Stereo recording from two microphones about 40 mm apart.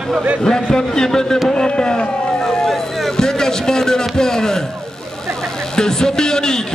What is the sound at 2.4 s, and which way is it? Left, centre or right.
Speech, centre.